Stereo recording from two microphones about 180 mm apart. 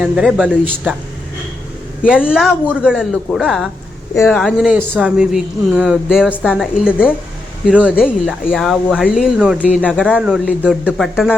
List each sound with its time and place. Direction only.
0.0 s speech: 5° right (ahead or behind)
2.0 s speech: 5° right (ahead or behind)